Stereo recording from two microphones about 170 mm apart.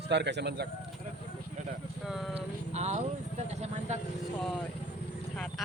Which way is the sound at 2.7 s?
40° right (ahead or behind).